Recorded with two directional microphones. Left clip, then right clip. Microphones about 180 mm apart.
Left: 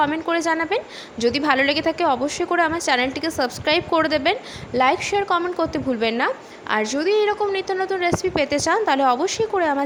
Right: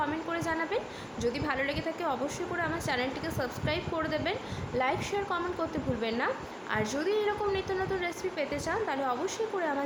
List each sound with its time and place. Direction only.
0.0 s a woman's voice: 50° left (ahead or behind)